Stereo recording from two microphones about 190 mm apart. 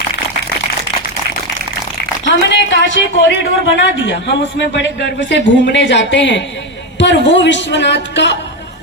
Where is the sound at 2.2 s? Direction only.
70° left (ahead or behind).